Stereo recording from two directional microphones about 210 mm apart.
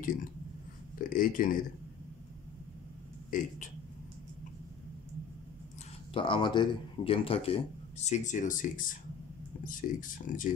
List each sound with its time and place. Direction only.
0.0 s speech: 40° left (ahead or behind)
3.3 s speech: 40° left (ahead or behind)
6.1 s a man's voice: 25° left (ahead or behind); by 10.5 s 40° left (ahead or behind)